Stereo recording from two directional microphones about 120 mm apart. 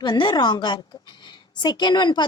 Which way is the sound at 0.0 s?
40° left (ahead or behind).